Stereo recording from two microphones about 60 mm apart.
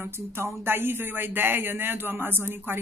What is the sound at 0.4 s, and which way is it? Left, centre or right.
Speech, right.